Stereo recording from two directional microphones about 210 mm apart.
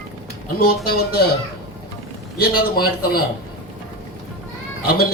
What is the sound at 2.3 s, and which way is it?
Speech, 45° left (ahead or behind).